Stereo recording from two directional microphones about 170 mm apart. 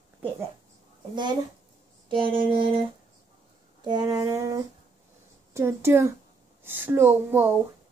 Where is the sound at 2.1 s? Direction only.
30° right (ahead or behind).